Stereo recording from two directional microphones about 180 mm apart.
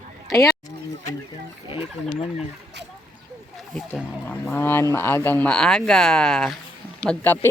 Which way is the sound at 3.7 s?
10° left (ahead or behind).